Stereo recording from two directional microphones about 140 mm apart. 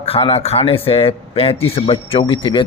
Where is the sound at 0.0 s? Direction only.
45° left (ahead or behind).